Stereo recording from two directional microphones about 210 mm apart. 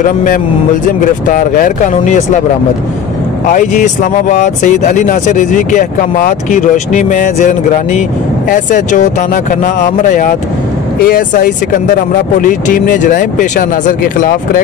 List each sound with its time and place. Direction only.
1.2 s speech: 40° left (ahead or behind)
3.5 s speech: 35° left (ahead or behind)